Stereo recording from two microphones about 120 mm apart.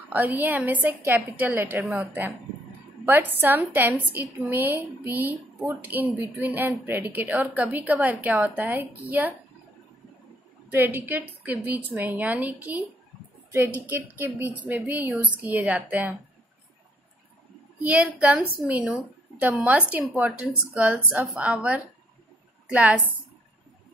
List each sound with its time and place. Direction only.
0.1 s a woman's voice: 15° right (ahead or behind)
10.7 s a woman's voice: 15° right (ahead or behind)
17.8 s a woman's voice: 10° right (ahead or behind)